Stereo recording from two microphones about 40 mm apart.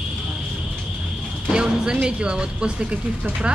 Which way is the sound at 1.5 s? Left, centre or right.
Right.